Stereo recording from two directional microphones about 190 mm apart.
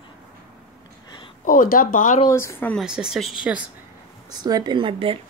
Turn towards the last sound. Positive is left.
turn(degrees=-30)  # may be behind; listen again after turning